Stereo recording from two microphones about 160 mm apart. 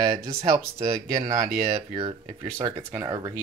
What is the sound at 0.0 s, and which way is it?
Speech, 25° right (ahead or behind).